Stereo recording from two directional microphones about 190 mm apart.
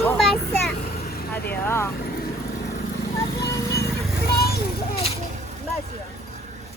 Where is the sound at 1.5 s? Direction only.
15° left (ahead or behind).